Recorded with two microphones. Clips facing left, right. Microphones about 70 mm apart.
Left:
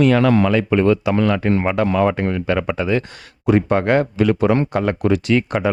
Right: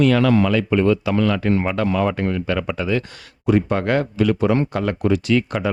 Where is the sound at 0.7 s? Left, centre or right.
Left.